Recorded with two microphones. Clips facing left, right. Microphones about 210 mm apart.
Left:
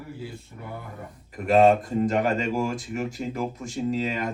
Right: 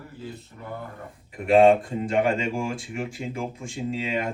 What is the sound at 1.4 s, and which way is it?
Speech, 40° left (ahead or behind).